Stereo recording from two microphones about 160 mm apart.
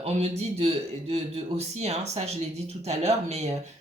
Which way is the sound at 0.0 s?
40° right (ahead or behind).